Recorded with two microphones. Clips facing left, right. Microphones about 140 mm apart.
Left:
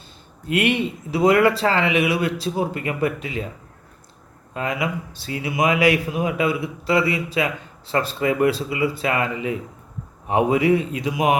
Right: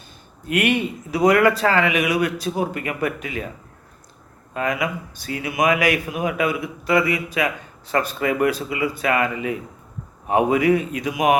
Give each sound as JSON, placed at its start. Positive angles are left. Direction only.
{"t": 0.4, "sound": "speech", "side_deg": 25}
{"t": 4.5, "sound": "speech", "side_deg": 25}